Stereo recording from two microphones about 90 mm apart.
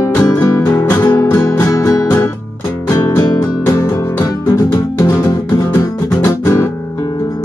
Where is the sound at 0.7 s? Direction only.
25° left (ahead or behind).